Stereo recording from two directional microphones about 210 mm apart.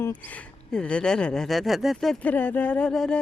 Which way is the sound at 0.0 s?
10° left (ahead or behind).